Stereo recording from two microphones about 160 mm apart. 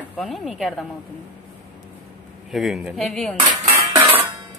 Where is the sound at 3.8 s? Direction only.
15° right (ahead or behind).